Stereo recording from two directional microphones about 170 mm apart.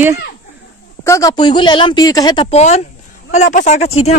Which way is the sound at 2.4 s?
40° left (ahead or behind).